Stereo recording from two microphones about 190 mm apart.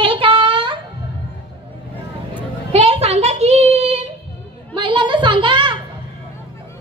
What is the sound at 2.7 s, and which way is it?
A child's voice, 30° right (ahead or behind).